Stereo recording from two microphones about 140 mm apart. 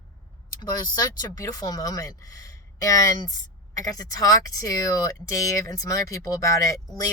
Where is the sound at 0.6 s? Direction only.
30° left (ahead or behind).